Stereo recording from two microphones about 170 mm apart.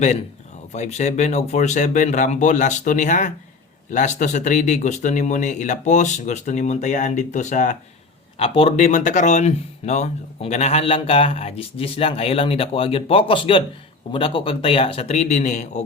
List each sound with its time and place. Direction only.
0.7 s speech: 40° left (ahead or behind)
8.4 s speech: 35° left (ahead or behind)
8.9 s speech: 45° left (ahead or behind)